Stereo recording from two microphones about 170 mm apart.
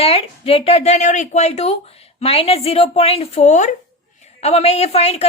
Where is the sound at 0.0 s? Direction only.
35° left (ahead or behind).